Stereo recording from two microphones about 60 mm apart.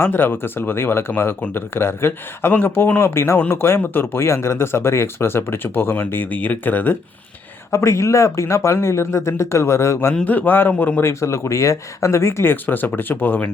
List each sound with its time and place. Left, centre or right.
0.0 s speech: left
7.7 s speech: left
10.2 s a man's voice: left
11.0 s speech: left
12.6 s speech: left